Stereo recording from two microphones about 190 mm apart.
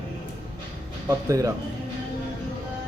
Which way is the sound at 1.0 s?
15° right (ahead or behind).